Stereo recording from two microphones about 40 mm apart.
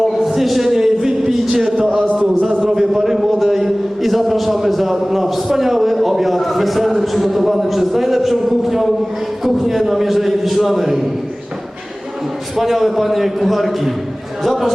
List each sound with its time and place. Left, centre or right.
0.0 s a sound: centre
7.0 s a man's voice: centre
12.5 s a man's voice: centre